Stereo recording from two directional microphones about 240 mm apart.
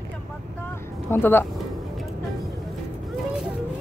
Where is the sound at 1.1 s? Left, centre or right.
Centre.